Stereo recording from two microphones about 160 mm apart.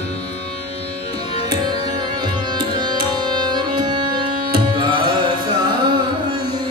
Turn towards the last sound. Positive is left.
turn(degrees=-30)  # may be behind; listen again after turning